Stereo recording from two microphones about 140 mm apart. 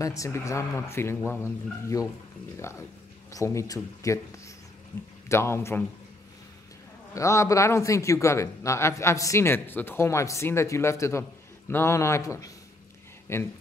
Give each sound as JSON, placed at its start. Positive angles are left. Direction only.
{"t": 0.0, "sound": "a man's voice", "side_deg": 25}
{"t": 5.3, "sound": "speech", "side_deg": 20}
{"t": 7.2, "sound": "a man's voice", "side_deg": 20}